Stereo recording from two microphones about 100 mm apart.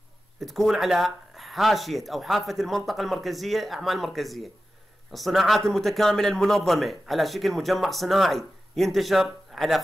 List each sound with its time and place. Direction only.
0.4 s a man's voice: centre (ahead or behind)